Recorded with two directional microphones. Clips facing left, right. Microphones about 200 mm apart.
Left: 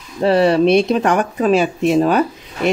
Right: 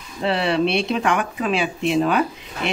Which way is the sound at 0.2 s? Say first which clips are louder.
Left 7 dB; 40° left (ahead or behind).